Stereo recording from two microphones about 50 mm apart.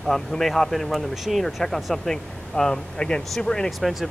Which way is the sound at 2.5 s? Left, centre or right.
Centre.